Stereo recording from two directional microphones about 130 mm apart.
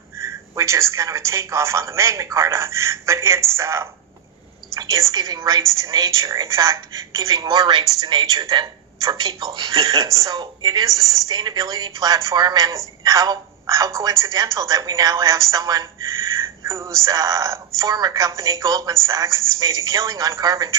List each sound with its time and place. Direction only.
0.2 s a woman's voice: 20° right (ahead or behind)